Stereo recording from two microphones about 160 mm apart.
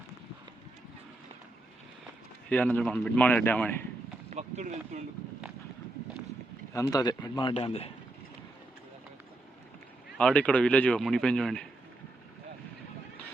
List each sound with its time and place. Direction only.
2.5 s speech: 10° left (ahead or behind)
4.3 s speech: 50° right (ahead or behind)
6.7 s speech: 25° left (ahead or behind); by 7.9 s 40° left (ahead or behind)
10.2 s speech: 5° left (ahead or behind)